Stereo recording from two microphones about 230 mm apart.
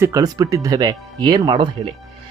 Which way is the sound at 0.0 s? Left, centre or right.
Centre.